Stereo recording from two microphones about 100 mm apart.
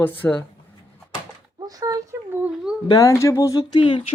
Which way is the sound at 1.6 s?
40° right (ahead or behind).